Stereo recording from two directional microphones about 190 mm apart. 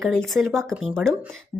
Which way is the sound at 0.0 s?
Centre (ahead or behind).